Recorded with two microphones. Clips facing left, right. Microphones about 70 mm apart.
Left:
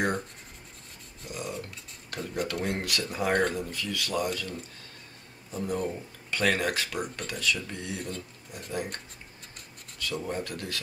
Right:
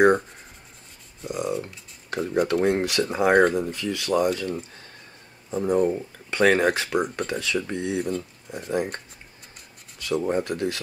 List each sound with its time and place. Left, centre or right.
1.3 s speech: right